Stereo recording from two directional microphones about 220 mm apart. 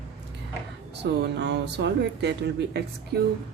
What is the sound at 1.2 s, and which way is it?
A woman's voice, 50° right (ahead or behind).